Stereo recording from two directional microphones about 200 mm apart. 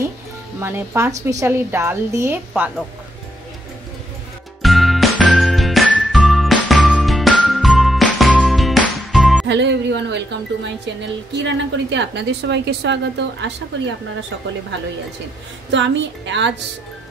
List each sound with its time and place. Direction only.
0.6 s a woman's voice: 10° right (ahead or behind)
4.6 s music: centre (ahead or behind)
9.5 s speech: 60° right (ahead or behind)
15.7 s speech: 65° right (ahead or behind)